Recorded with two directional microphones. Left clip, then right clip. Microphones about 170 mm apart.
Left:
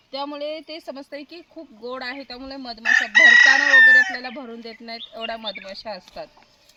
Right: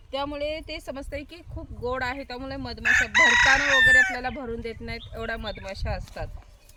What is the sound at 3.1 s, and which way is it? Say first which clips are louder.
Chicken: left 8 dB; 55° right (ahead or behind).